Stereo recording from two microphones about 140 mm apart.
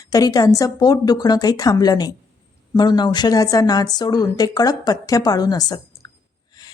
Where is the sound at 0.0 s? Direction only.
25° left (ahead or behind).